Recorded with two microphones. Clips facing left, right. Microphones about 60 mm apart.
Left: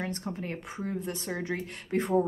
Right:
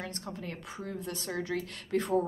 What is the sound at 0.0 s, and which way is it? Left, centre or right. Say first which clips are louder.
Speech: left 5 dB; left.